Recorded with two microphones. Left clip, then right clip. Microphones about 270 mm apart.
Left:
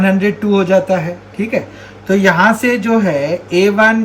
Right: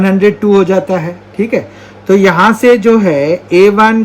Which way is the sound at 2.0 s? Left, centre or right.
Right.